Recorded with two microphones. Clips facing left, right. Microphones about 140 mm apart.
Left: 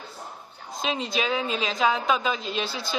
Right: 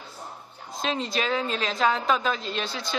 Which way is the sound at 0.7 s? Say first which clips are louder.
Even; 5° left (ahead or behind).